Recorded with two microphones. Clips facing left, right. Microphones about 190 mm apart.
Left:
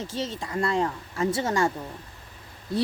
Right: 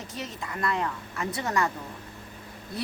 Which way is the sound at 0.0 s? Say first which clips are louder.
Left 6 dB; 30° left (ahead or behind).